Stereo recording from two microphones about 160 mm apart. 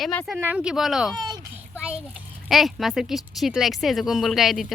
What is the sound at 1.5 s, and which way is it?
A child's voice, 10° right (ahead or behind).